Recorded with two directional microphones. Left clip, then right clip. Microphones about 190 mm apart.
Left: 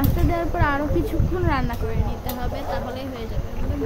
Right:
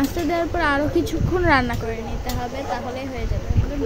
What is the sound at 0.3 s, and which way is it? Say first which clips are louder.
A woman's voice: right 2 dB; 25° right (ahead or behind).